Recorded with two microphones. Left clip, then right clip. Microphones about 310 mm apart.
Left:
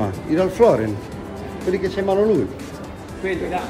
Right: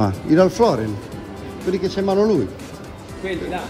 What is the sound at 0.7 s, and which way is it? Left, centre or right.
Speech, centre.